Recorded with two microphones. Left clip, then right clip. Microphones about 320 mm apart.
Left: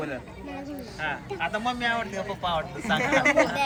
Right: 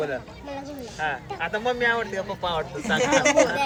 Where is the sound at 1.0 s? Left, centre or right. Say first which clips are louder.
Right 2 dB; right.